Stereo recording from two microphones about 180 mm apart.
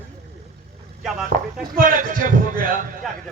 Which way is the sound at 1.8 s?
45° right (ahead or behind).